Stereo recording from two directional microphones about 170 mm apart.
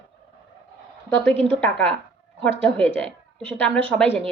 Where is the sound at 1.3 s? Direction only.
35° right (ahead or behind).